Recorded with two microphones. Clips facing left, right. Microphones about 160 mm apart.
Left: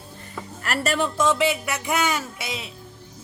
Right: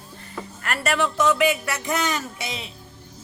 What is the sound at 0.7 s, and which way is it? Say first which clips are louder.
Speech: even; 30° left (ahead or behind).